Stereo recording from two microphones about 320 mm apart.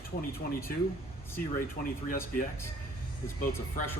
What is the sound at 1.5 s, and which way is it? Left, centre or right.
Speech, left.